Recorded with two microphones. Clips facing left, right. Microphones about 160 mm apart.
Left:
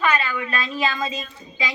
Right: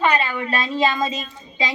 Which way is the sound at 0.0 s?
30° right (ahead or behind).